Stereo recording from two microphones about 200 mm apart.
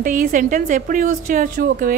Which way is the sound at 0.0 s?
45° right (ahead or behind).